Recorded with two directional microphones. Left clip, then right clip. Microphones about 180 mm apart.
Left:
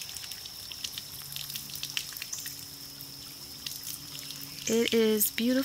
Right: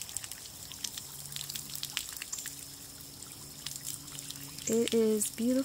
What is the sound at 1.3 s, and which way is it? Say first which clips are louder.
Water: left 2 dB; 25° right (ahead or behind).